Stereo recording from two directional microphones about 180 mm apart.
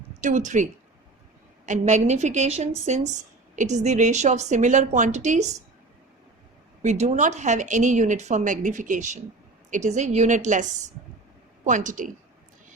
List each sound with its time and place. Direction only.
0.2 s a woman's voice: 45° right (ahead or behind)
6.8 s a woman's voice: 40° right (ahead or behind)